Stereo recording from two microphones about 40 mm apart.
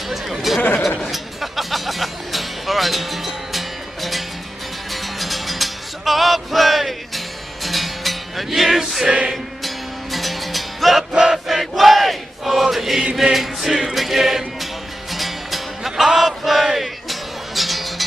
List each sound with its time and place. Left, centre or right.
0.1 s chatter: centre
1.1 s music: centre
9.0 s music: right
10.1 s music: centre
11.4 s chant: centre
13.3 s music: centre